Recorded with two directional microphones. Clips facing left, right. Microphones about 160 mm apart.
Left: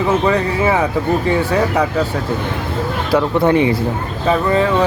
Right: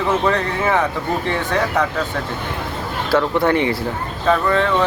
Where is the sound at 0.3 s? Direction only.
10° left (ahead or behind).